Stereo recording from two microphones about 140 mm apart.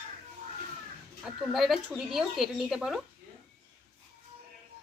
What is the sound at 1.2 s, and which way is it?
A woman's voice, centre (ahead or behind).